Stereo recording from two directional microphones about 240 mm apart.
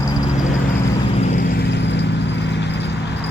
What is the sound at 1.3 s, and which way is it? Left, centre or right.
Vehicle, left.